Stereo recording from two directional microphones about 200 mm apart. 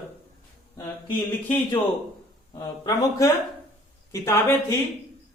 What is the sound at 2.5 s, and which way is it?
Speech, 20° left (ahead or behind).